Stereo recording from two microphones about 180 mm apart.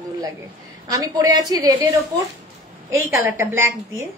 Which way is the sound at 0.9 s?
20° right (ahead or behind).